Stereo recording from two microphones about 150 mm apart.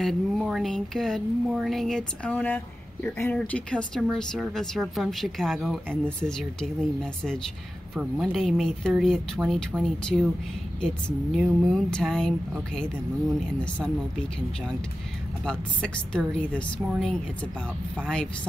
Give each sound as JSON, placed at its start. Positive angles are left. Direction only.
{"t": 0.0, "sound": "speech", "side_deg": 0}
{"t": 13.6, "sound": "speech", "side_deg": 10}
{"t": 15.4, "sound": "speech", "side_deg": 5}